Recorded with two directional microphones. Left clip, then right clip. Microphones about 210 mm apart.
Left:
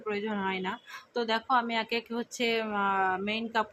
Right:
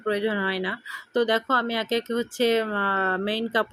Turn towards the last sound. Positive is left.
turn(degrees=-20)  # may be behind; listen again after turning